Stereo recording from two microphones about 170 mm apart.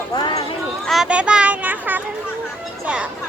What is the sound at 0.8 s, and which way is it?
A child's voice, 5° right (ahead or behind).